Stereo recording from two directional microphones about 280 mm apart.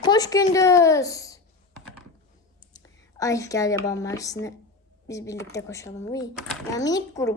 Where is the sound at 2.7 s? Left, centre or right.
Centre.